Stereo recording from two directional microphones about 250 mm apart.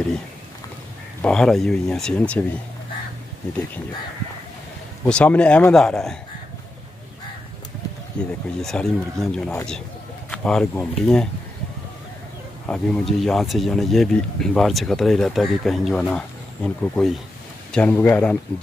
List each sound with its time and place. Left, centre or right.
1.2 s speech: centre
5.0 s speech: centre
8.2 s speech: centre
12.6 s speech: centre